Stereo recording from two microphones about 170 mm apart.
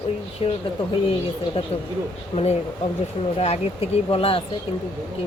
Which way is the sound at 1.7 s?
35° left (ahead or behind).